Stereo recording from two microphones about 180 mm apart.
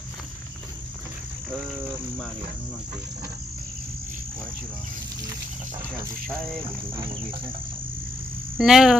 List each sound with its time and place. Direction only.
7.0 s cricket: 30° right (ahead or behind)
8.5 s speech: centre (ahead or behind)